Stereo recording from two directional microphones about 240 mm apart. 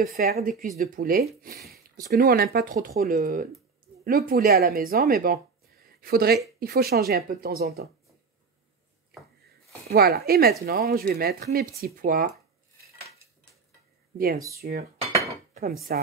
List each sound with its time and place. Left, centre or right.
0.0 s speech: right
9.8 s speech: right
14.1 s speech: right
15.0 s cutlery: right
15.9 s speech: right